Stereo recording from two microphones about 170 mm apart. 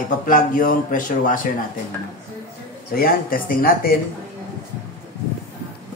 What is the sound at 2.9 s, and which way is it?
Speech, 60° left (ahead or behind).